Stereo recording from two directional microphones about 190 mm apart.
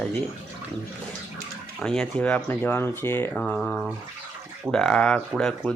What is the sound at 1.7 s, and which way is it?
Speech, 5° left (ahead or behind).